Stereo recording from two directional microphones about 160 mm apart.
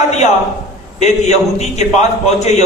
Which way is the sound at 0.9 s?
45° left (ahead or behind).